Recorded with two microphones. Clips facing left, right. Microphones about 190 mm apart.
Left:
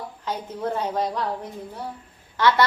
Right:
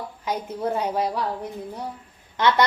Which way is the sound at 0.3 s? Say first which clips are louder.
Right 2 dB; 10° right (ahead or behind).